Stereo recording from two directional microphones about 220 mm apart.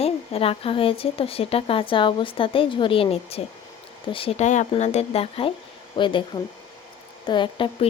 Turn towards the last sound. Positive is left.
turn(degrees=20)  # may be behind; listen again after turning